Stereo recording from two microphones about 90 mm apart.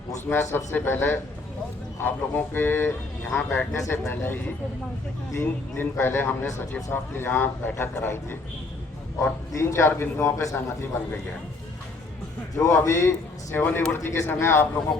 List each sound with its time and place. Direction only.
0.3 s speech: 25° left (ahead or behind)
9.5 s a man's voice: 35° left (ahead or behind)
12.5 s a man's voice: 35° left (ahead or behind)